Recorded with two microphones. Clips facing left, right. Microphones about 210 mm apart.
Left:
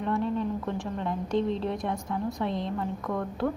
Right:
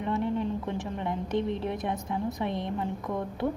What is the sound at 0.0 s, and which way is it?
A woman's voice, 20° right (ahead or behind).